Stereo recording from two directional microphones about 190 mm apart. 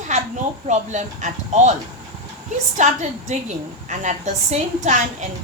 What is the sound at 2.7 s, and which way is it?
A woman's voice, 40° right (ahead or behind).